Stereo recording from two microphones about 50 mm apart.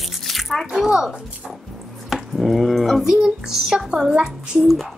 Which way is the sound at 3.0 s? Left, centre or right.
Centre.